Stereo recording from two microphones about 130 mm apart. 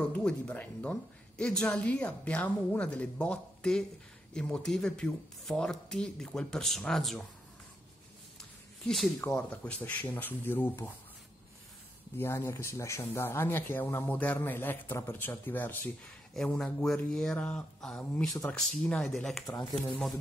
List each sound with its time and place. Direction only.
0.1 s speech: 10° left (ahead or behind)
8.4 s a sound: centre (ahead or behind)
9.2 s speech: 15° left (ahead or behind)
12.2 s speech: 20° left (ahead or behind); by 20.2 s centre (ahead or behind)